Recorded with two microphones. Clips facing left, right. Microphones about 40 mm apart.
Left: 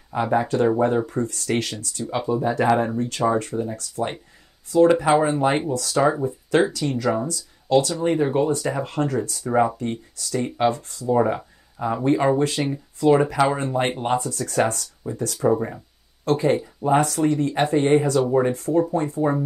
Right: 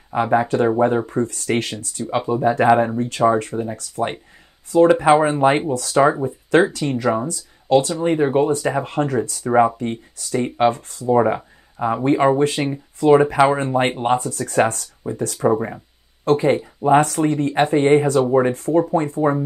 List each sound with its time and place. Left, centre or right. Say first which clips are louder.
0.1 s speech: right 4 dB; right
6.8 s speech: right 3 dB; right
11.1 s speech: right 3 dB; right
15.5 s speech: right 2 dB; centre; by 19.3 s right